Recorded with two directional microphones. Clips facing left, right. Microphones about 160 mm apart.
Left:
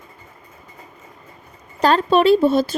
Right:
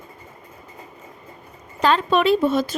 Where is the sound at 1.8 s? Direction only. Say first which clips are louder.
Left 3 dB; 35° left (ahead or behind).